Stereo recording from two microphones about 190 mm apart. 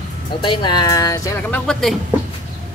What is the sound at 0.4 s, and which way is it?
Speech, 25° left (ahead or behind).